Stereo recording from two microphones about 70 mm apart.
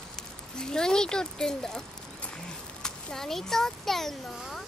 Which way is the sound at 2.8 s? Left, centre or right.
Centre.